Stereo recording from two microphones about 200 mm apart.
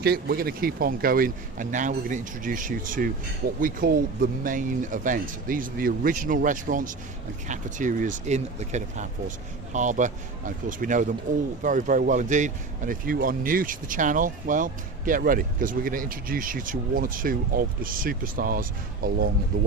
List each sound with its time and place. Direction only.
0.0 s speech: 50° right (ahead or behind)